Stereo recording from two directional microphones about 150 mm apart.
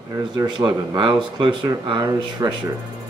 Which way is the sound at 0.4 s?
30° right (ahead or behind).